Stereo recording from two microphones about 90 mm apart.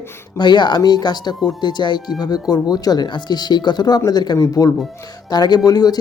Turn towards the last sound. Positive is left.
turn(degrees=45)  # may be behind; listen again after turning